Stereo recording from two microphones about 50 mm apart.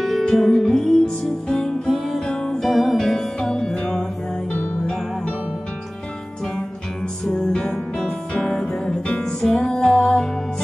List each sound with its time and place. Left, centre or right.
0.2 s music: centre
2.6 s music: centre
7.2 s music: centre
9.0 s music: left
9.4 s music: centre